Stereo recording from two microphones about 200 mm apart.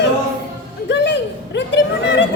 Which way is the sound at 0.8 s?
60° left (ahead or behind).